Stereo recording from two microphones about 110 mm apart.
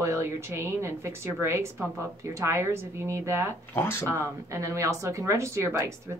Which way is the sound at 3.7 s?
20° left (ahead or behind).